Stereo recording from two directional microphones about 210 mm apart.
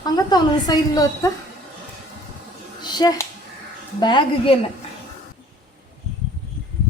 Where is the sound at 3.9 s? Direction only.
20° left (ahead or behind).